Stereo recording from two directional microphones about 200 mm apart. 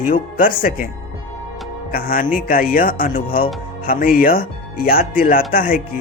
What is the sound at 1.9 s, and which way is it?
Speech, 45° left (ahead or behind).